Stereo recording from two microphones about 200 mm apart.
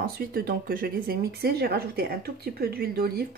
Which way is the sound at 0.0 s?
50° right (ahead or behind).